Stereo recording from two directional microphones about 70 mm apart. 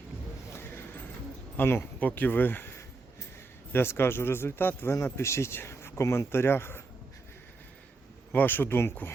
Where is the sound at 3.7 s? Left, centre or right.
Left.